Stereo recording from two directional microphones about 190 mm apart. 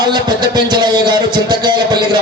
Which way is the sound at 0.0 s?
20° right (ahead or behind).